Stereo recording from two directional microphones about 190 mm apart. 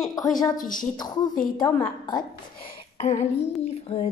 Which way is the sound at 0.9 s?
20° left (ahead or behind).